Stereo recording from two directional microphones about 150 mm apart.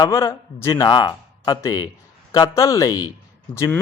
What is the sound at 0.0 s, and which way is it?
A man's voice, 20° left (ahead or behind).